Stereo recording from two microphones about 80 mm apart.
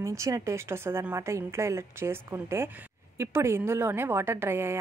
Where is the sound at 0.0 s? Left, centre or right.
Right.